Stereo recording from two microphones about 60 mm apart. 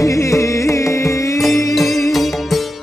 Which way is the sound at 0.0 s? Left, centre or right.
Left.